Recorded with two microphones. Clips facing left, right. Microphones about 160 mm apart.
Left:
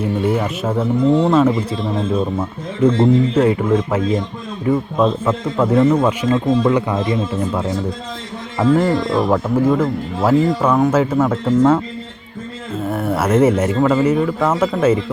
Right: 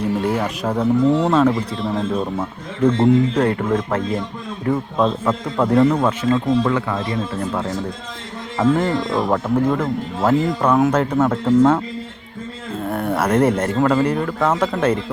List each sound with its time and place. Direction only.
0.0 s speech: 5° left (ahead or behind)
3.0 s speech: 5° left (ahead or behind)
6.7 s speech: 20° left (ahead or behind)
8.5 s speech: 5° left (ahead or behind)
12.8 s a sound: 5° left (ahead or behind)
13.7 s speech: 5° left (ahead or behind)